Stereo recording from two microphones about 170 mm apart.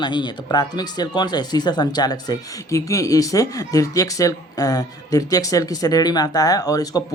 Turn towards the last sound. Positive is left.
turn(degrees=20)  # may be behind; listen again after turning